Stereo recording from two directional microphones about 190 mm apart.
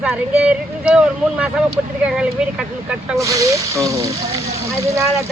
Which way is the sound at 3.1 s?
15° right (ahead or behind).